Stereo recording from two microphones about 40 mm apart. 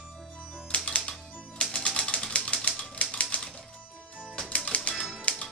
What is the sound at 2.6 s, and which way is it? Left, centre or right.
Typewriter, left.